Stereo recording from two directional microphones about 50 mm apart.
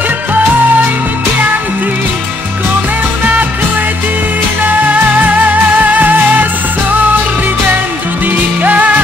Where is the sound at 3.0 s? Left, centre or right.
Right.